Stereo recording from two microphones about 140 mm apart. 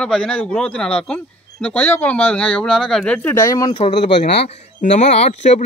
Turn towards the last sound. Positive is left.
turn(degrees=50)  # may be behind; listen again after turning